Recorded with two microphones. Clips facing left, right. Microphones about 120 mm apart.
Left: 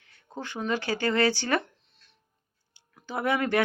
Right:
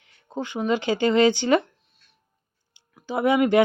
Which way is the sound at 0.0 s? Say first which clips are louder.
Right 7 dB; 20° right (ahead or behind).